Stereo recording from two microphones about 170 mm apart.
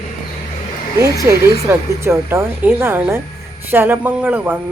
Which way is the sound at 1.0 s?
20° right (ahead or behind).